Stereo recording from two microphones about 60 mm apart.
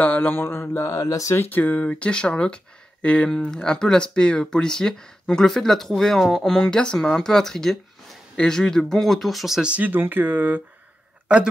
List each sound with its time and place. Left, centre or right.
0.0 s mantra: left
0.4 s mantra: left
0.8 s speech: left
1.3 s speech: left
1.9 s speech: centre
9.6 s speech: centre
9.8 s speech: right